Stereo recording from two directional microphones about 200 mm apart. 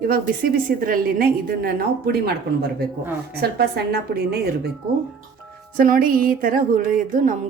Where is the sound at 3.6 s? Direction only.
50° right (ahead or behind).